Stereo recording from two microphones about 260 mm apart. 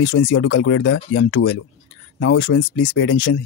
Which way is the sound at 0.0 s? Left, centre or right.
Left.